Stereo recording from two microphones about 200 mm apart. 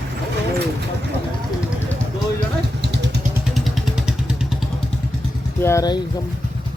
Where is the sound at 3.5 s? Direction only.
Centre (ahead or behind).